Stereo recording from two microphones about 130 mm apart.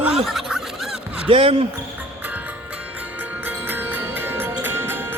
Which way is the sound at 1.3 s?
45° right (ahead or behind).